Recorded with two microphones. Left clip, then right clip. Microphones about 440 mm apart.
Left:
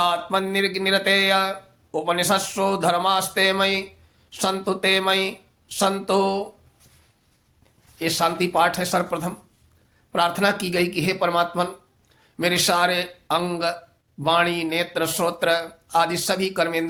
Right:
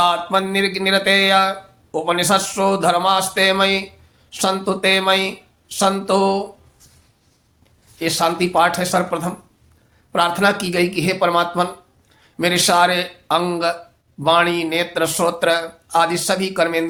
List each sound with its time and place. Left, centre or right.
0.0 s music: left
7.9 s music: left
12.2 s speech: left
14.2 s music: left